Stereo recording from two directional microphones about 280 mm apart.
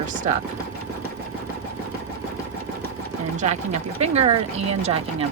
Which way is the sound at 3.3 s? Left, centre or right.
Right.